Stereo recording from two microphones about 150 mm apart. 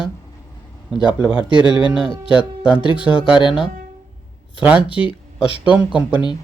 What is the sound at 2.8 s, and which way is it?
Speech, 35° left (ahead or behind).